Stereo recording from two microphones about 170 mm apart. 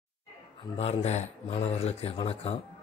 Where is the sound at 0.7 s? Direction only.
40° left (ahead or behind).